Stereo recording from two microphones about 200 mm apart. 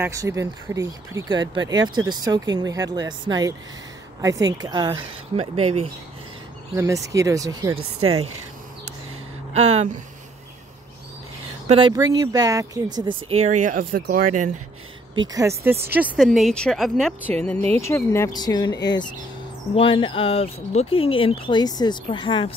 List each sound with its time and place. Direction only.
0.0 s speech: 15° right (ahead or behind)
6.7 s speech: 15° right (ahead or behind)
7.7 s speech: 90° right
9.5 s speech: 30° right (ahead or behind)
11.6 s speech: 25° right (ahead or behind)
13.4 s speech: 35° right (ahead or behind)
15.3 s speech: 15° right (ahead or behind)
16.2 s a woman's voice: centre (ahead or behind); by 22.5 s 25° left (ahead or behind)